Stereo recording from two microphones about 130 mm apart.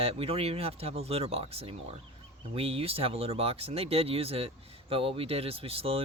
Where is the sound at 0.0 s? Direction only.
50° right (ahead or behind).